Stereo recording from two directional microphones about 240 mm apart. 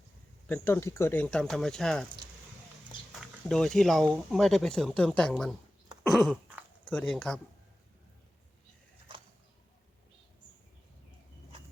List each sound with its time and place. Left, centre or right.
0.4 s speech: centre
3.2 s speech: centre
6.0 s throat clearing: centre